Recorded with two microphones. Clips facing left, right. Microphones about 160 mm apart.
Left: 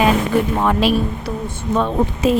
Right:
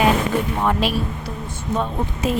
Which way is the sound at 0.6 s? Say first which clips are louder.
Left 4 dB; 90° left.